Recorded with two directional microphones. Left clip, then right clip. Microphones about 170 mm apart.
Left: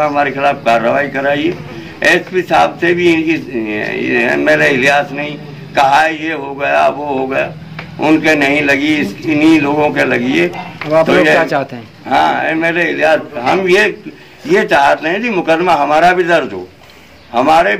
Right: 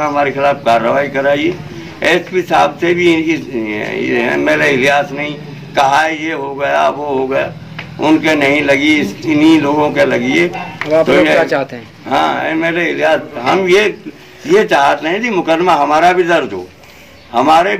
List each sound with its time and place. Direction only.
0.0 s a man's voice: 5° left (ahead or behind)
11.4 s speech: 80° left
12.1 s a man's voice: 5° left (ahead or behind)